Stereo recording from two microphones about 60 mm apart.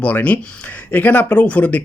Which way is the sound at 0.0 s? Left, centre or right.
Left.